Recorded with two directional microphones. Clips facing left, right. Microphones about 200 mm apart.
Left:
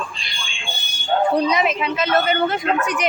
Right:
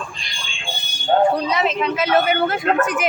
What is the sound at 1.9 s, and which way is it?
Speech, 10° right (ahead or behind).